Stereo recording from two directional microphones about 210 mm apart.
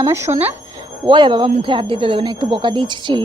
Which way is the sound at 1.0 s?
20° right (ahead or behind).